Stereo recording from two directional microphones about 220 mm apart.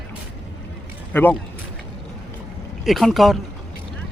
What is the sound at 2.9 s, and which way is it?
Speech, centre (ahead or behind).